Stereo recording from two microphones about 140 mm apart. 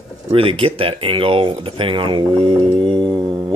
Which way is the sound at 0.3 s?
40° right (ahead or behind).